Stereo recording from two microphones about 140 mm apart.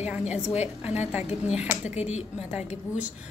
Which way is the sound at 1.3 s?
50° left (ahead or behind).